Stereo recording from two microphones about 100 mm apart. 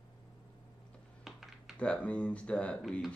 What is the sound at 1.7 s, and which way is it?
Speech, 10° left (ahead or behind).